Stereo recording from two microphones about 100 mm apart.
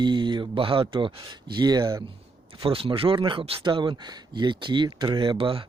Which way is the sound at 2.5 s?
65° right (ahead or behind).